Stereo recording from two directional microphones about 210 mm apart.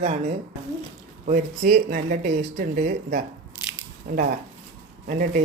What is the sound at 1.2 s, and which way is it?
Speech, 40° right (ahead or behind).